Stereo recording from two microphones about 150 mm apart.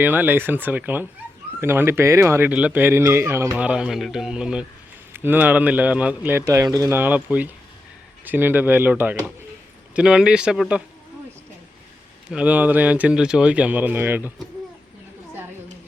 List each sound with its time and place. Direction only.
0.0 s speech: 10° right (ahead or behind)
12.3 s speech: 10° right (ahead or behind)